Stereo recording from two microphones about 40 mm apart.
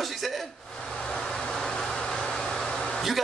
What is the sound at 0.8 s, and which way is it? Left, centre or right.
Vehicle, centre.